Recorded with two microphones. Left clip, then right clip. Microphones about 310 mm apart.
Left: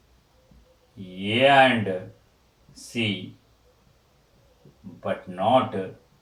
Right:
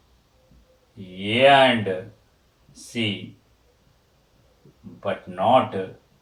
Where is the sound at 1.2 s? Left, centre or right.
Centre.